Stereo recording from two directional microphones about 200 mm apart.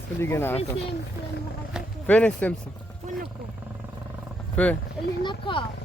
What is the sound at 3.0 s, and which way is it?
Wild animals, 40° right (ahead or behind).